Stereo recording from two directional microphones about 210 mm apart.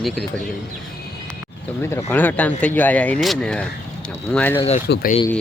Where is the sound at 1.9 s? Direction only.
10° left (ahead or behind).